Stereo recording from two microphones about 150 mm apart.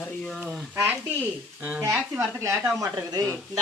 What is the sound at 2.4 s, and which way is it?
Speech, 20° right (ahead or behind).